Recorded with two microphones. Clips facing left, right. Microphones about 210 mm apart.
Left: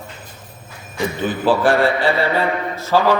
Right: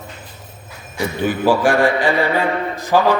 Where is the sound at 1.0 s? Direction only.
15° right (ahead or behind).